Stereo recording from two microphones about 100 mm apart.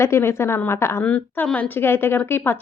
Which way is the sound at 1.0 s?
15° left (ahead or behind).